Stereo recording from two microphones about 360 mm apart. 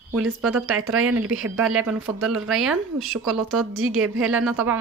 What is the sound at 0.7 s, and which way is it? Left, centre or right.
Speech, right.